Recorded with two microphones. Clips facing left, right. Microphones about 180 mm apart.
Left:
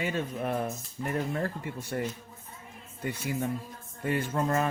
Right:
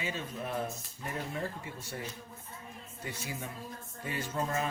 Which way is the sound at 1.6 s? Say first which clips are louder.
Left 8 dB; 55° left (ahead or behind).